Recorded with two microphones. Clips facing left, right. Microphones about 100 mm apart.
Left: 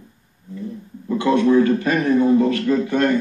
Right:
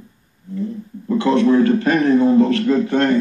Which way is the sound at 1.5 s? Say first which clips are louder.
Right 2 dB; 35° right (ahead or behind).